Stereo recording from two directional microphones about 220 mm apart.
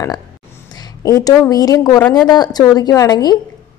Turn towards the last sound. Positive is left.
turn(degrees=20)  # may be behind; listen again after turning